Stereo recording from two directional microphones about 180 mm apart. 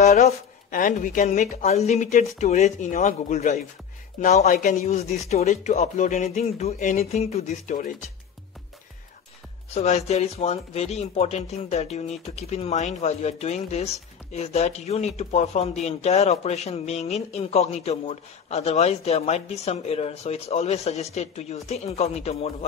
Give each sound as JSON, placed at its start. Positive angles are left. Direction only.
{"t": 0.2, "sound": "a man's voice", "side_deg": 45}
{"t": 9.8, "sound": "speech", "side_deg": 35}